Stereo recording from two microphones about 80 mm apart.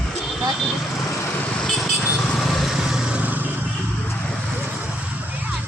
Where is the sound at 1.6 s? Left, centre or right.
Centre.